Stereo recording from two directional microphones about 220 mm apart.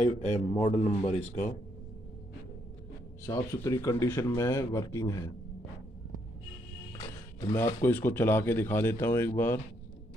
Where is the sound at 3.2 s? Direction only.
10° left (ahead or behind).